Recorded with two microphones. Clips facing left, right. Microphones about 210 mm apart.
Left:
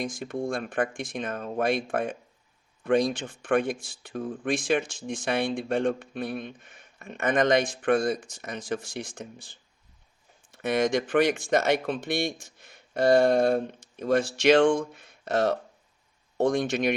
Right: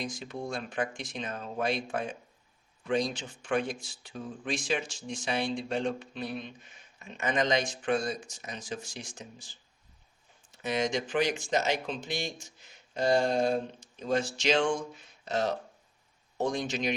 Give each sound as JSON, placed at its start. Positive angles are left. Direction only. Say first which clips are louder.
{"t": 0.0, "sound": "speech", "louder": "left 6 dB", "side_deg": 50}